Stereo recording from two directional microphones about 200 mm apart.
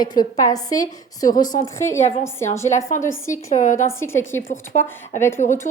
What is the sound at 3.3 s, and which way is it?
Speech, 40° left (ahead or behind).